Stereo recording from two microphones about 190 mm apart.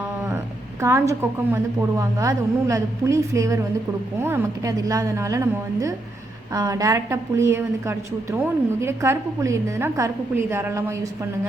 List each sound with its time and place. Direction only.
0.3 s speech: 15° right (ahead or behind)